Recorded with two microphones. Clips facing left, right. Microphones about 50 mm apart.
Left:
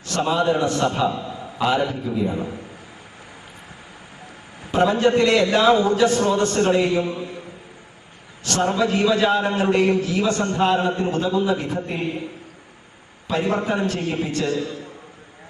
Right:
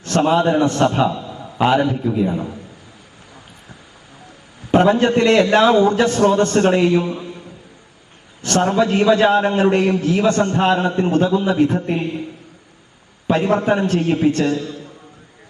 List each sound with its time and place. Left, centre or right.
0.0 s a man's voice: right
1.3 s a sound: right
1.9 s a man's voice: right
4.7 s a man's voice: right
8.4 s a man's voice: right
13.3 s a man's voice: right
14.5 s a man's voice: left